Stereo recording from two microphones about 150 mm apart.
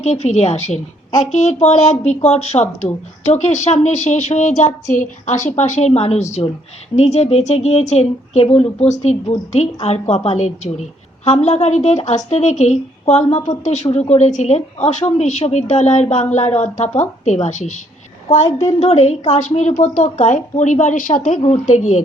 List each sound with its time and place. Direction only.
0.0 s a woman's voice: 50° left (ahead or behind)
18.8 s a woman's voice: 45° left (ahead or behind)